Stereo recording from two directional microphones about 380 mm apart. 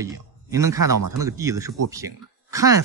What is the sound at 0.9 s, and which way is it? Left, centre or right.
Speech, right.